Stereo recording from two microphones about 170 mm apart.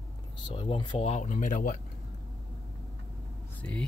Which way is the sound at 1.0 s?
45° left (ahead or behind).